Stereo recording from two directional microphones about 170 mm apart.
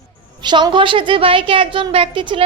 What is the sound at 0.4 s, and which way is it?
A woman's voice, 25° right (ahead or behind).